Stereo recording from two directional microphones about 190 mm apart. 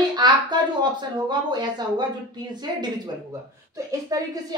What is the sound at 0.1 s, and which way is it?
A woman's voice, 20° right (ahead or behind).